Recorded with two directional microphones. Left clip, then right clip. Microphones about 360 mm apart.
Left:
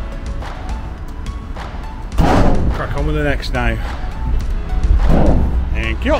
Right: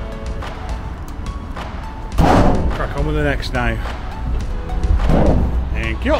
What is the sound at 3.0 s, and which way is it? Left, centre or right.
Speech, centre.